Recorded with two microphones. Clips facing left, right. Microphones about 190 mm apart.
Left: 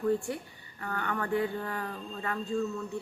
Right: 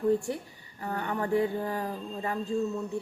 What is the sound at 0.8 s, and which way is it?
Speech, 25° right (ahead or behind).